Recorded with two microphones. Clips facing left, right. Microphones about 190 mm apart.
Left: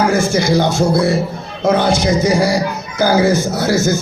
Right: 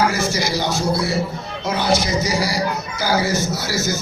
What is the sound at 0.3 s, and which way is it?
A man's voice, 55° left (ahead or behind).